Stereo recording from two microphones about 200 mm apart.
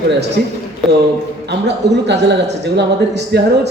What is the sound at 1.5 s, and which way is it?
A man's voice, 60° right (ahead or behind).